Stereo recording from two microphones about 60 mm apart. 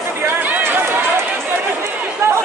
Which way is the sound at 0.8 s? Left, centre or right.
Right.